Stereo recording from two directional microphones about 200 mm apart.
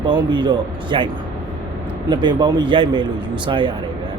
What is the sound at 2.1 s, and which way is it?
Speech, 20° right (ahead or behind).